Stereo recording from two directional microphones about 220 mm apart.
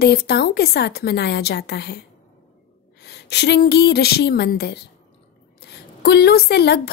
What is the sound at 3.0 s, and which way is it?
A woman's voice, 50° left (ahead or behind).